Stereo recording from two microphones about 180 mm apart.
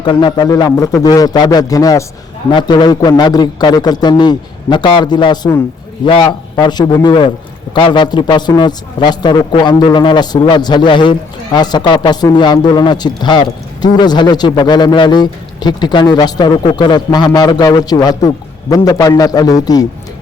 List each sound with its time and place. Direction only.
0.0 s a man's voice: 25° left (ahead or behind)